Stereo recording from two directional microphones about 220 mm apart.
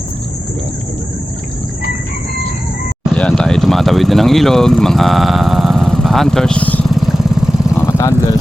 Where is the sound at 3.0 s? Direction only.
5° left (ahead or behind).